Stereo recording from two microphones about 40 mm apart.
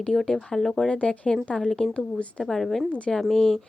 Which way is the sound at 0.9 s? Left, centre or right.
Left.